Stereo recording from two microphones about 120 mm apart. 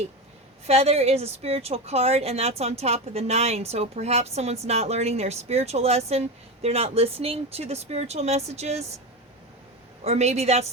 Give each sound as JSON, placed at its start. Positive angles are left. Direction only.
{"t": 0.7, "sound": "a woman's voice", "side_deg": -60}
{"t": 10.0, "sound": "a woman's voice", "side_deg": -65}